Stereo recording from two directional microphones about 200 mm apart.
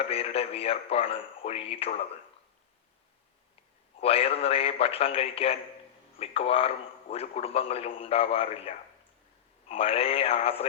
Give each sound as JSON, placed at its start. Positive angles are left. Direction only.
{"t": 0.1, "sound": "a man's voice", "side_deg": 30}
{"t": 4.0, "sound": "a man's voice", "side_deg": 30}